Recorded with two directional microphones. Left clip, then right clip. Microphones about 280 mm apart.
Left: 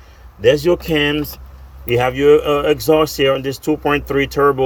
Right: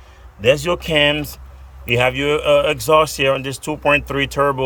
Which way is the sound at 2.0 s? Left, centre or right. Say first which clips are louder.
Left 6 dB; centre.